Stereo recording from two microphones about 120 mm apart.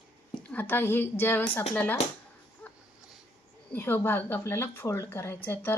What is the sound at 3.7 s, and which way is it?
Speech, 20° left (ahead or behind).